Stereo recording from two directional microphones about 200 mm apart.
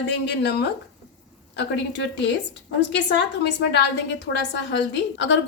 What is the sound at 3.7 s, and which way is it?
A woman's voice, 60° left (ahead or behind).